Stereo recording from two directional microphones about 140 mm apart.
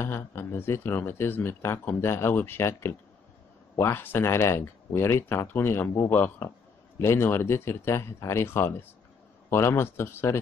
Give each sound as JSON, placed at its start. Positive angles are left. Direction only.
{"t": 0.0, "sound": "speech", "side_deg": 20}